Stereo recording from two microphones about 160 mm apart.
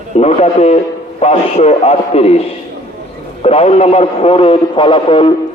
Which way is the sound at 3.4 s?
40° left (ahead or behind).